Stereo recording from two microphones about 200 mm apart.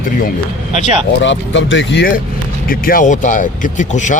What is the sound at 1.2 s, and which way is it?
Speech, 65° left (ahead or behind).